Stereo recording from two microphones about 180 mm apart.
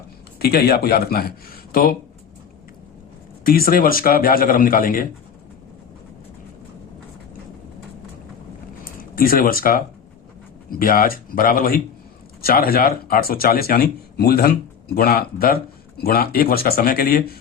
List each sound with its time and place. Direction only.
0.3 s speech: 60° left (ahead or behind)
3.4 s a man's voice: 55° left (ahead or behind)
8.8 s a man's voice: 50° left (ahead or behind)